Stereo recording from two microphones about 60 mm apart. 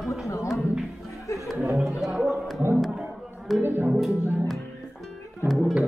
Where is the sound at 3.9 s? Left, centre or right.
Centre.